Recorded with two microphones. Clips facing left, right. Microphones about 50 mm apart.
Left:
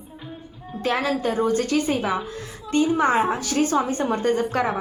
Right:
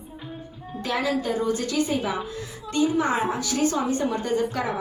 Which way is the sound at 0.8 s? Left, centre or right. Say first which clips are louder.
Left 2 dB; left.